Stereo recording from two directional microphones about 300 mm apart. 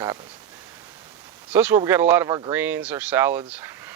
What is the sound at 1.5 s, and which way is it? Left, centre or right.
Speech, centre.